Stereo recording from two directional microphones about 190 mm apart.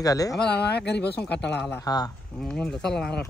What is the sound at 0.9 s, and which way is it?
Speech, 60° left (ahead or behind).